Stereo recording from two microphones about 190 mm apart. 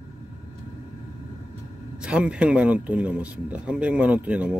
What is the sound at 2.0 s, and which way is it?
Speech, 5° right (ahead or behind).